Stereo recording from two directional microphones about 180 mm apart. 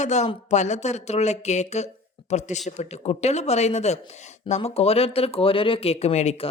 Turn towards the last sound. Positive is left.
turn(degrees=35)  # may be behind; listen again after turning